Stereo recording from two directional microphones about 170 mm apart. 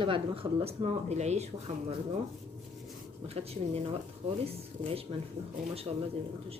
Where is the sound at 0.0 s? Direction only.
30° right (ahead or behind).